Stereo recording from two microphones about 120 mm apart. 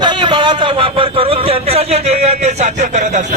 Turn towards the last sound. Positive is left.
turn(degrees=-85)